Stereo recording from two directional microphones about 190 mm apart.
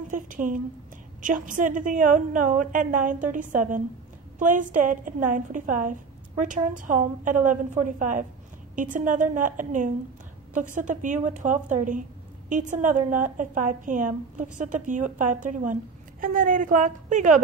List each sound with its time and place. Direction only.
0.1 s a woman's voice: 45° right (ahead or behind)